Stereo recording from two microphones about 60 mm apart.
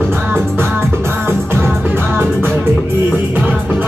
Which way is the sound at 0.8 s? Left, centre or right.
Right.